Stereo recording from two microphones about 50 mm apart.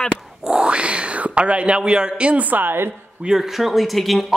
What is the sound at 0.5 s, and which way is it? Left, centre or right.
Cat, centre.